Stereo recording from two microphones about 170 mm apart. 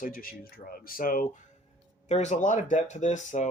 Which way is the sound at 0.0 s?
55° left (ahead or behind).